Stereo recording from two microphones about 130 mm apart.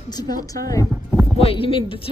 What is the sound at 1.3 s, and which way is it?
Speech, 45° left (ahead or behind).